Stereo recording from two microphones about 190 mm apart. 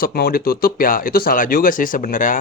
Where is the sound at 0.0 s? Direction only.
55° left (ahead or behind).